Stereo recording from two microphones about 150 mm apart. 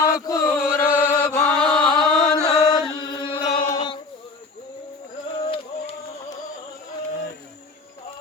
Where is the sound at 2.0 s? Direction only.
25° left (ahead or behind).